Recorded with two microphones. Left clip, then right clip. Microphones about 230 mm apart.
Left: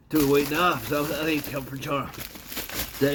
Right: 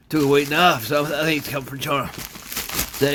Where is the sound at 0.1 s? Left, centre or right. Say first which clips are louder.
Right 4 dB; right.